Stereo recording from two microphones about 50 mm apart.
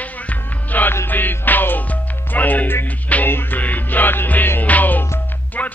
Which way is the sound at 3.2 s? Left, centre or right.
Left.